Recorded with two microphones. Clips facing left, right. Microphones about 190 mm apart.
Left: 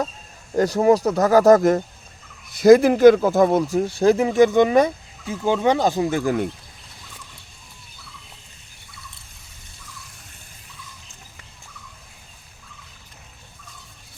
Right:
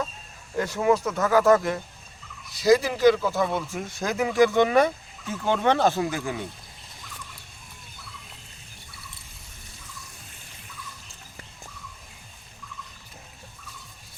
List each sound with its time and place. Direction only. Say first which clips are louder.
0.5 s speech: left 6 dB; 40° left (ahead or behind); by 6.1 s 15° left (ahead or behind)
6.1 s speech: left 8 dB; 30° left (ahead or behind)